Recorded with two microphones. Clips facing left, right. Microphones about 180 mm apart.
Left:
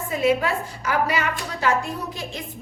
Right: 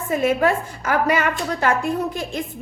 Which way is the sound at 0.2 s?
50° right (ahead or behind).